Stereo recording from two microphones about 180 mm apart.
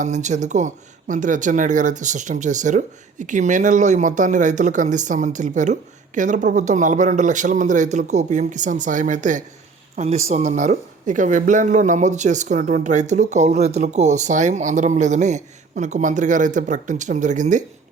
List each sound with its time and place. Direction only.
0.0 s speech: 40° right (ahead or behind)